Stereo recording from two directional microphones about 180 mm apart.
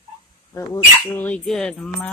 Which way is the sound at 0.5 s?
15° left (ahead or behind).